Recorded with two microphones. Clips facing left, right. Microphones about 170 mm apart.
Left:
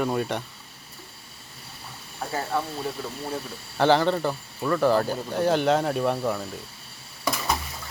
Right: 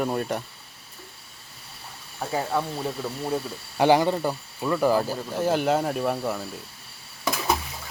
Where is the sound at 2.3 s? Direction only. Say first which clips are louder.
Right 2 dB; 15° right (ahead or behind).